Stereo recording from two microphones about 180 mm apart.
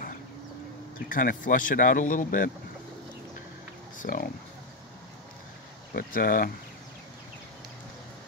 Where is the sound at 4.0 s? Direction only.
50° left (ahead or behind).